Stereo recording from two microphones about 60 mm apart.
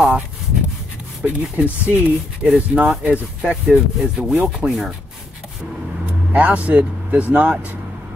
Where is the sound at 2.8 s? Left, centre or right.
Centre.